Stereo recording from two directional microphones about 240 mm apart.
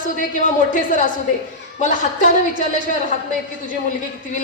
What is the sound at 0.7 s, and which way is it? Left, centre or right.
A woman's voice, left.